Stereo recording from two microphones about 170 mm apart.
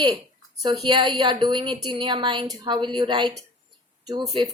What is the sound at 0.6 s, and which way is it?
A woman's voice, 25° right (ahead or behind).